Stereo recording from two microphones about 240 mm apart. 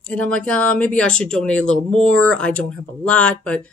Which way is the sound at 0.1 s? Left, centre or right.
Centre.